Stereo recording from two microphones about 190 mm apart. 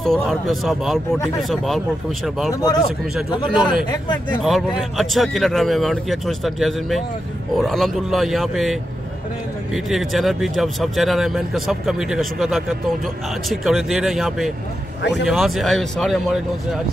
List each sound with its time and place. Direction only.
0.0 s speech: centre (ahead or behind)
2.5 s speech: 20° left (ahead or behind)
3.9 s speech: 25° left (ahead or behind)
4.4 s speech: centre (ahead or behind)
9.8 s speech: centre (ahead or behind)
15.0 s speech: 65° left (ahead or behind)
15.2 s speech: centre (ahead or behind)